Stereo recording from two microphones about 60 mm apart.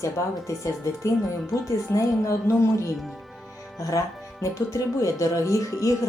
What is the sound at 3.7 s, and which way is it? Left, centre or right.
Speech, left.